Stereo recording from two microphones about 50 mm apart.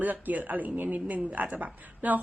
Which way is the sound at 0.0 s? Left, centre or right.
Right.